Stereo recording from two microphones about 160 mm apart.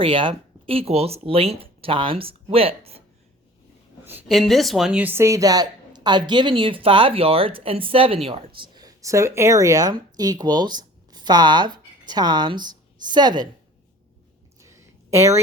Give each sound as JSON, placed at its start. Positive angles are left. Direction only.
{"t": 0.0, "sound": "speech", "side_deg": -30}
{"t": 4.3, "sound": "speech", "side_deg": 0}
{"t": 14.6, "sound": "a sound", "side_deg": -20}